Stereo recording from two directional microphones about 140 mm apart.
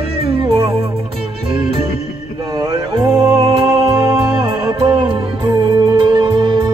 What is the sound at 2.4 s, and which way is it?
Music, 25° right (ahead or behind).